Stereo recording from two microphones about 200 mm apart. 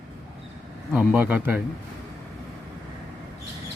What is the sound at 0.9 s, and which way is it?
Speech, 5° right (ahead or behind).